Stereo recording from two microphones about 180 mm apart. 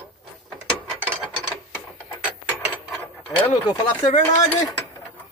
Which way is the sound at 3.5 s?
15° left (ahead or behind).